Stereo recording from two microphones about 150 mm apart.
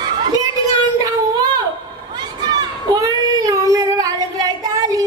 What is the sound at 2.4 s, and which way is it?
Child singing, 25° right (ahead or behind).